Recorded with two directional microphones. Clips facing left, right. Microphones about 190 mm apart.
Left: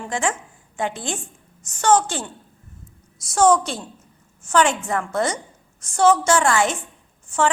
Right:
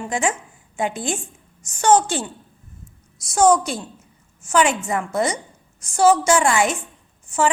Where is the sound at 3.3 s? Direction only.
10° right (ahead or behind).